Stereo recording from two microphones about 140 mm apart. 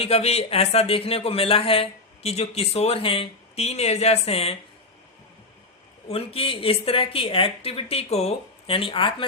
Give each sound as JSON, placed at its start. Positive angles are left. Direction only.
{"t": 0.0, "sound": "speech", "side_deg": 45}
{"t": 6.1, "sound": "speech", "side_deg": 45}